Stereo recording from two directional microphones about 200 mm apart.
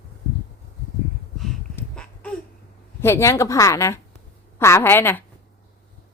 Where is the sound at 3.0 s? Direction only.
15° left (ahead or behind).